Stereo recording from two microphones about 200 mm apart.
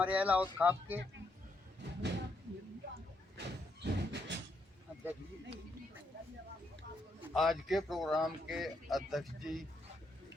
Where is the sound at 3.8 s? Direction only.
60° right (ahead or behind).